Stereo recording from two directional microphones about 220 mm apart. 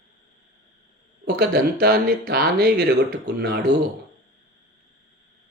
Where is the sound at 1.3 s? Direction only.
45° right (ahead or behind).